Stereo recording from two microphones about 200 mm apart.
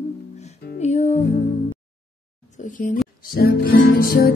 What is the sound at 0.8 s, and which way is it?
Music, 35° left (ahead or behind).